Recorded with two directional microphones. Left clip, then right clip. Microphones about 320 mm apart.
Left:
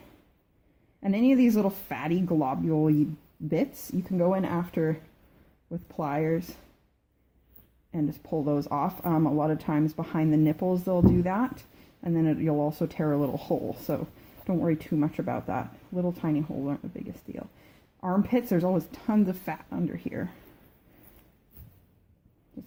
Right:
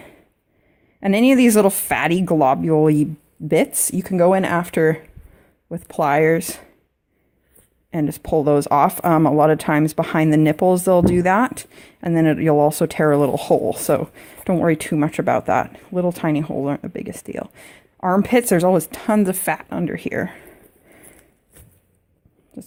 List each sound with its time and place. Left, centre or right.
0.9 s speech: right
7.9 s speech: right